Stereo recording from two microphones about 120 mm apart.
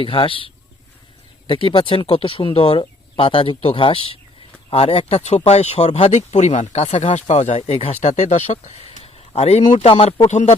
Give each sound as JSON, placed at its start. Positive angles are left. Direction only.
{"t": 0.0, "sound": "speech", "side_deg": 50}
{"t": 8.0, "sound": "speech", "side_deg": 75}
{"t": 10.2, "sound": "speech", "side_deg": 75}